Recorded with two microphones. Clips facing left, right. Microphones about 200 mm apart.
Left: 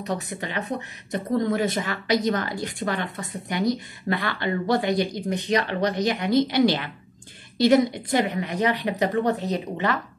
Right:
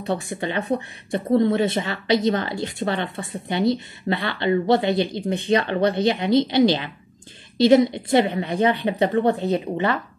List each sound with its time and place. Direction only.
0.0 s speech: 30° right (ahead or behind)